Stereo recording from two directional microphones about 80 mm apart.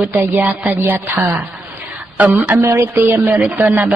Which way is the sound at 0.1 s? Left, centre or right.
Right.